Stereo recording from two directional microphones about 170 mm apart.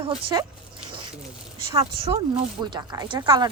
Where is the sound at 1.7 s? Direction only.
35° right (ahead or behind).